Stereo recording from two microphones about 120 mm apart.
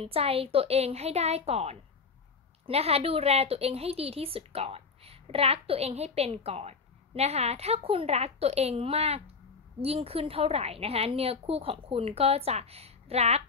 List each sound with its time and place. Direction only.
0.0 s a woman's voice: 50° right (ahead or behind)